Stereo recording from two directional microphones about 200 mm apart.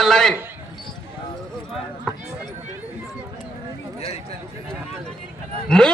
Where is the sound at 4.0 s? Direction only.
30° left (ahead or behind).